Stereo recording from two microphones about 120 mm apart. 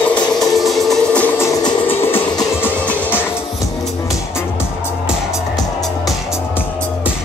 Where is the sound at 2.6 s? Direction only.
15° left (ahead or behind).